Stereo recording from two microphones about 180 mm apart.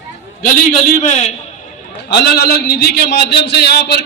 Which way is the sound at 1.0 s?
40° left (ahead or behind).